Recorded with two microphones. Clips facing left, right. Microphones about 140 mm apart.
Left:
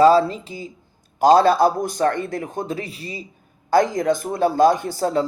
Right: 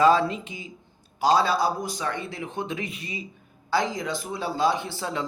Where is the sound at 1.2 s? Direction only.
50° left (ahead or behind); by 3.2 s 35° left (ahead or behind).